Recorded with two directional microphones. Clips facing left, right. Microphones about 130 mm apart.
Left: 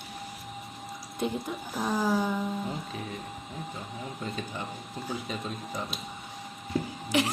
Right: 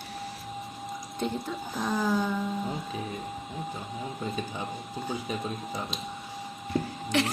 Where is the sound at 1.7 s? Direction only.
5° left (ahead or behind).